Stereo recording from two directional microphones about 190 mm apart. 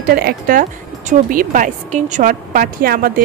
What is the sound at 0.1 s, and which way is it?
Speech, 55° right (ahead or behind).